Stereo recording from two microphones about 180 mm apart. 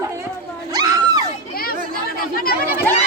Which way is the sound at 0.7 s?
20° right (ahead or behind).